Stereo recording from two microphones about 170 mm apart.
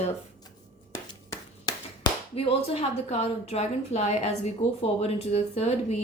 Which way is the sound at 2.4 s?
35° left (ahead or behind).